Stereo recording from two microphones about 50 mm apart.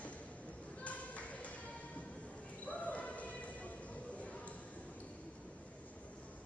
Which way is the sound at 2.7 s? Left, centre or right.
Left.